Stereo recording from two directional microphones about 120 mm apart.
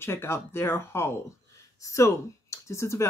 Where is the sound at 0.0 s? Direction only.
20° left (ahead or behind).